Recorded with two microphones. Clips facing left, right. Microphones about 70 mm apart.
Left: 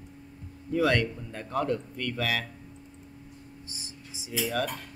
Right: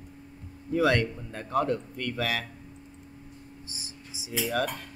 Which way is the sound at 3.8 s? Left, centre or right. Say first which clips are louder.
Even; left.